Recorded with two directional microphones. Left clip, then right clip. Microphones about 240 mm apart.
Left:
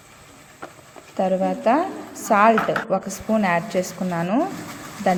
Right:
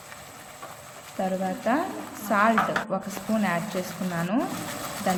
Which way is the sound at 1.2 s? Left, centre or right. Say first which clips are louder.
Left 7 dB; left.